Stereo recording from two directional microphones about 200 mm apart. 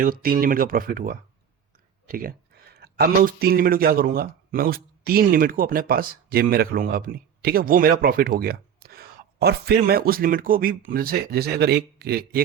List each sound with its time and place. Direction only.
0.0 s a man's voice: 45° right (ahead or behind)